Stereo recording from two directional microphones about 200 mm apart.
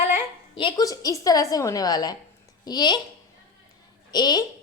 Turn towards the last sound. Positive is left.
turn(degrees=20)  # may be behind; listen again after turning